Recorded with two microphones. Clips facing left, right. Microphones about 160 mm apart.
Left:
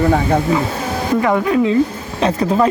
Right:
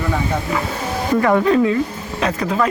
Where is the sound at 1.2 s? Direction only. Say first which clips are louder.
Right 2 dB; 10° left (ahead or behind).